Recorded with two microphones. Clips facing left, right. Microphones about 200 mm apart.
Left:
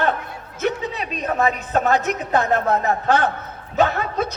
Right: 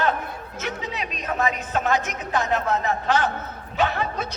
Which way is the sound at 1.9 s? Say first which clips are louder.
Left 4 dB; 65° left (ahead or behind).